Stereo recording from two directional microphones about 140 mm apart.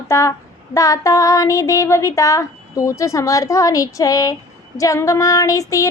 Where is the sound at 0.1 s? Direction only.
20° left (ahead or behind).